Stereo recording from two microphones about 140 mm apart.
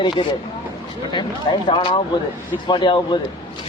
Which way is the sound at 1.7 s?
40° left (ahead or behind).